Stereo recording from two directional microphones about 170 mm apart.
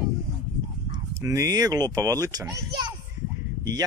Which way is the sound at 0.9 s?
15° right (ahead or behind).